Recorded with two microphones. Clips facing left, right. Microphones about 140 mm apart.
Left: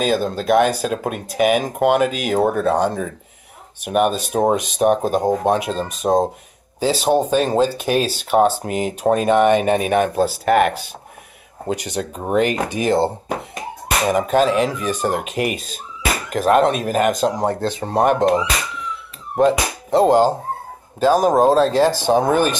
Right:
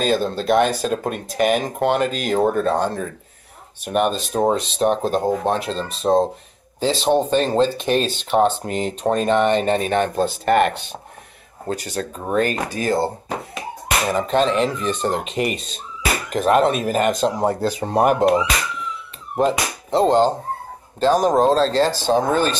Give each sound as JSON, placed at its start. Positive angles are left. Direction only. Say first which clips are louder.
{"t": 0.0, "sound": "speech", "louder": "left 1 dB", "side_deg": 10}
{"t": 11.6, "sound": "speech", "louder": "left 2 dB", "side_deg": 20}
{"t": 14.0, "sound": "speech", "louder": "left 3 dB", "side_deg": 10}